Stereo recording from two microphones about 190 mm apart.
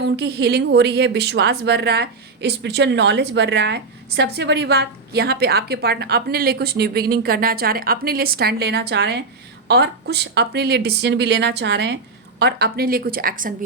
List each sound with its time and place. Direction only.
0.0 s a woman's voice: 60° right (ahead or behind)